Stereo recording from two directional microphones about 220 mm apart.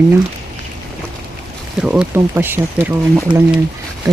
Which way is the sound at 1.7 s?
5° right (ahead or behind).